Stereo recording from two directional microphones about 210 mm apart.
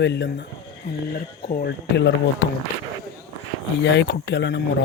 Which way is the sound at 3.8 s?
55° left (ahead or behind).